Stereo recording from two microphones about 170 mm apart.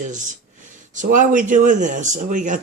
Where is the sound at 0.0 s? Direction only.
50° right (ahead or behind).